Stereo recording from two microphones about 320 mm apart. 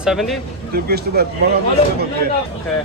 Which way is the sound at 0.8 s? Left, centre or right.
Right.